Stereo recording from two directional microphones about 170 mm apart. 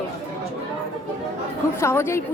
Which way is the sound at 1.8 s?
15° left (ahead or behind).